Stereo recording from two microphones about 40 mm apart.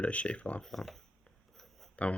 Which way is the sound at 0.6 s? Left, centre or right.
Centre.